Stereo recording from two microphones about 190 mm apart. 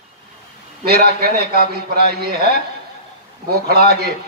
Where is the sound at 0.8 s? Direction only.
55° right (ahead or behind).